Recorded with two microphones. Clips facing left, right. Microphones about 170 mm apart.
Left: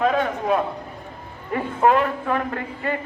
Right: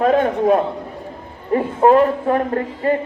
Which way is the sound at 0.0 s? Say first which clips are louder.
Right 6 dB; 45° right (ahead or behind).